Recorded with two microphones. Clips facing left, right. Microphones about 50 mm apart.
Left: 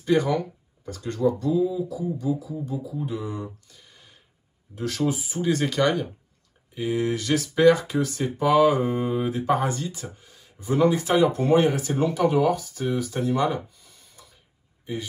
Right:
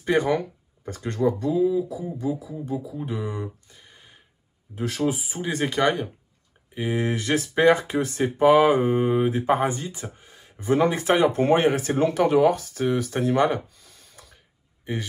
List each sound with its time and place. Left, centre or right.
0.0 s speech: right
6.7 s speech: right
11.9 s speech: right